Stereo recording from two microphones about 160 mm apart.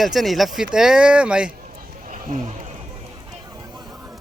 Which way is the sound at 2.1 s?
55° right (ahead or behind).